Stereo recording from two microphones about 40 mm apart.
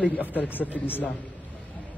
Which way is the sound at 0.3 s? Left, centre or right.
Left.